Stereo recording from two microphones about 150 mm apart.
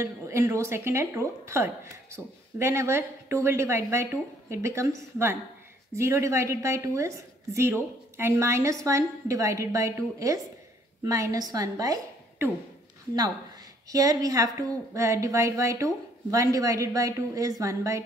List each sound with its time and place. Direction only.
0.0 s a woman's voice: 20° right (ahead or behind)
13.8 s a woman's voice: 25° right (ahead or behind)